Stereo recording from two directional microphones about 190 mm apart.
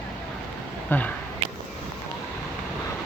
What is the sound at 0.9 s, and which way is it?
Speech, 10° left (ahead or behind).